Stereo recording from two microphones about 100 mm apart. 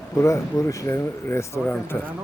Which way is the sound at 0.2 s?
30° left (ahead or behind).